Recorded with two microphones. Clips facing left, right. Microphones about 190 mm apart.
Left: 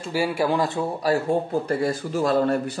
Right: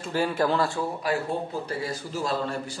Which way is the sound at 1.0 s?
45° left (ahead or behind).